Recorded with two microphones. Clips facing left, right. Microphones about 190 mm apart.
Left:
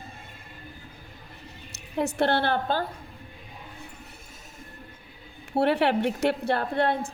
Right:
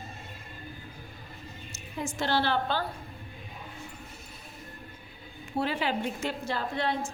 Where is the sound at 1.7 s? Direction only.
65° left (ahead or behind); by 2.8 s 50° left (ahead or behind).